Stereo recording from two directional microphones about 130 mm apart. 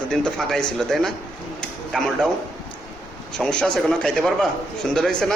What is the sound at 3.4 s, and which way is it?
Speech, 5° left (ahead or behind).